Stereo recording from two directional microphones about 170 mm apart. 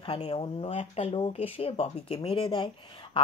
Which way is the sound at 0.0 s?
35° left (ahead or behind).